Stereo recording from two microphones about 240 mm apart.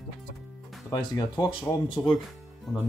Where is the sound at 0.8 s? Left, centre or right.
Centre.